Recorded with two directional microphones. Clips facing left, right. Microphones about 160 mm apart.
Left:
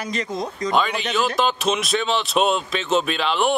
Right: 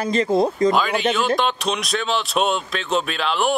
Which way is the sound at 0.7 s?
Centre (ahead or behind).